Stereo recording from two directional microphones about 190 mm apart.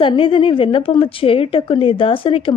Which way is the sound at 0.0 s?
25° left (ahead or behind).